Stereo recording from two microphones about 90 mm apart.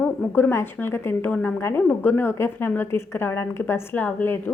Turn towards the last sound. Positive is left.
turn(degrees=20)  # may be behind; listen again after turning